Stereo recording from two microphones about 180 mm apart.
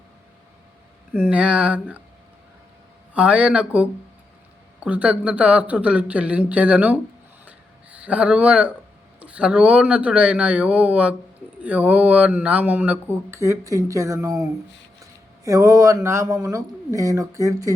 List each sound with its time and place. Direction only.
1.1 s speech: 10° right (ahead or behind)
3.2 s speech: 5° right (ahead or behind)
7.4 s a sound: 10° right (ahead or behind)
9.2 s speech: 5° right (ahead or behind)
15.4 s speech: 15° right (ahead or behind)